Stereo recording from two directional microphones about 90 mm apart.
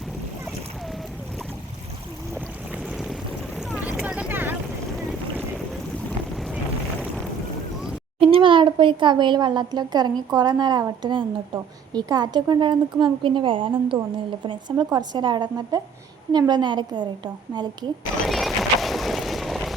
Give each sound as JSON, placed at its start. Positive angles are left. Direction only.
{"t": 2.7, "sound": "boat", "side_deg": 0}
{"t": 3.8, "sound": "vehicle", "side_deg": -20}
{"t": 6.3, "sound": "vehicle", "side_deg": 0}
{"t": 8.2, "sound": "a woman's voice", "side_deg": -80}
{"t": 11.1, "sound": "a woman's voice", "side_deg": -60}
{"t": 14.9, "sound": "a woman's voice", "side_deg": -55}
{"t": 18.3, "sound": "vehicle", "side_deg": 0}